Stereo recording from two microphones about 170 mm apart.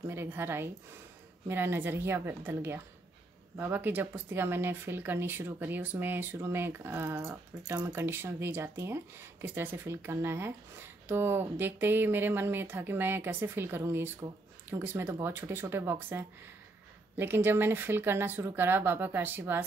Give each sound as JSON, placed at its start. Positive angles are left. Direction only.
{"t": 0.0, "sound": "speech", "side_deg": -15}